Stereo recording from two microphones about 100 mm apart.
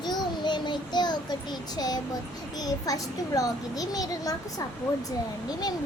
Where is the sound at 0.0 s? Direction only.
45° left (ahead or behind).